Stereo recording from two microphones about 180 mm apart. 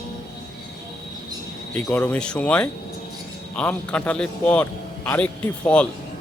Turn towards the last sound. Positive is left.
turn(degrees=5)  # may be behind; listen again after turning